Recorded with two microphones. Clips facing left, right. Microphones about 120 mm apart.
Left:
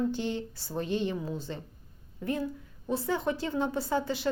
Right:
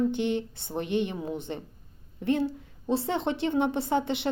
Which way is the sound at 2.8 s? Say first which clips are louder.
Right 2 dB; 25° right (ahead or behind).